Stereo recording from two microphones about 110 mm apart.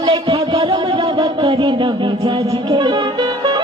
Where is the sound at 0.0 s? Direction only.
50° right (ahead or behind).